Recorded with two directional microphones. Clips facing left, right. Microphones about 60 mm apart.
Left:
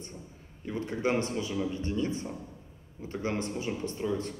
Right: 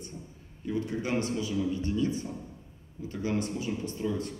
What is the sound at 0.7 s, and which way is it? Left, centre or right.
A man's voice, left.